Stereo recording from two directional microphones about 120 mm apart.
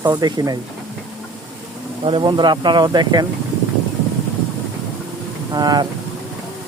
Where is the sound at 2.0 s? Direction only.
40° right (ahead or behind).